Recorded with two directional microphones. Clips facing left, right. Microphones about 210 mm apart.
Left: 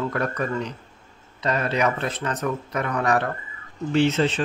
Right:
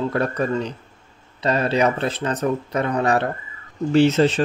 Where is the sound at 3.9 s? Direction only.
40° right (ahead or behind).